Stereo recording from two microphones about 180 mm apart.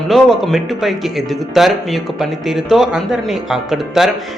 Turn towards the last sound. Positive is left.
turn(degrees=0)  # may be behind; listen again after turning